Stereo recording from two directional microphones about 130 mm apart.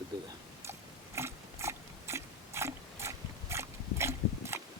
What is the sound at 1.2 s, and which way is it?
Biting, 20° right (ahead or behind).